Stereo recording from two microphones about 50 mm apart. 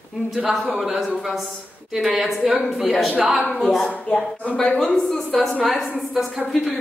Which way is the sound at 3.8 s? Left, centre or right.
Left.